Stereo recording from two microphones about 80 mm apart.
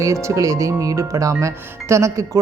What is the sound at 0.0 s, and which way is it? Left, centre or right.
Speech, right.